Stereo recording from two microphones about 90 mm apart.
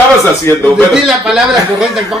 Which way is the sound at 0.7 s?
5° right (ahead or behind).